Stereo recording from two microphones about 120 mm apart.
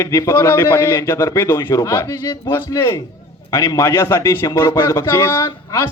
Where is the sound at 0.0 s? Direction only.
25° left (ahead or behind).